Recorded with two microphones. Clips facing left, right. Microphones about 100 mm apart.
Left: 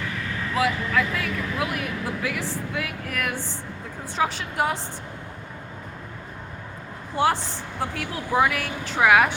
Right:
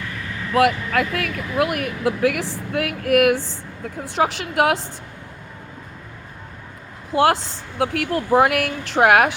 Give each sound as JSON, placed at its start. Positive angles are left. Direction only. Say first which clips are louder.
{"t": 0.5, "sound": "speech", "louder": "right 6 dB", "side_deg": -65}
{"t": 4.0, "sound": "a woman's voice", "louder": "right 4 dB", "side_deg": -80}
{"t": 7.1, "sound": "a woman's voice", "louder": "right 5 dB", "side_deg": -75}
{"t": 7.8, "sound": "speech", "louder": "right 9 dB", "side_deg": -60}